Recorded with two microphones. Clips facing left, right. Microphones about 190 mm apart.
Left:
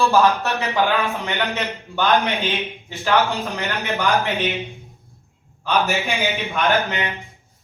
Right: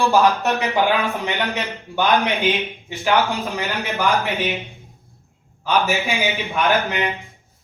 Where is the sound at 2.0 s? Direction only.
15° right (ahead or behind).